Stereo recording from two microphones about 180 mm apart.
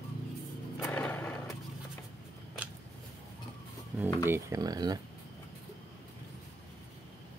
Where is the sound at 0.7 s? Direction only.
5° left (ahead or behind).